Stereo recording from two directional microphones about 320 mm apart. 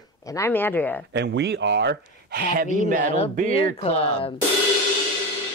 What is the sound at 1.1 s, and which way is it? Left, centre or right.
Speech, right.